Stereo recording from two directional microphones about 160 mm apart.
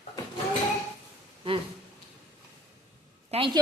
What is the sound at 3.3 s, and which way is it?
Speech, 35° right (ahead or behind).